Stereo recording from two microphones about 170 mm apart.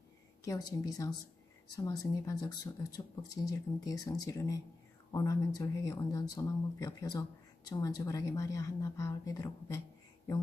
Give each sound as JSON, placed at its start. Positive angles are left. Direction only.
{"t": 0.5, "sound": "speech", "side_deg": 20}